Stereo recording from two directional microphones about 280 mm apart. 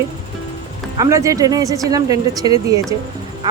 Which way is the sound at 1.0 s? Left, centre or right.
Centre.